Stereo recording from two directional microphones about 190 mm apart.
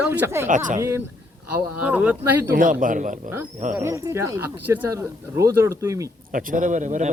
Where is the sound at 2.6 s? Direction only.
45° right (ahead or behind).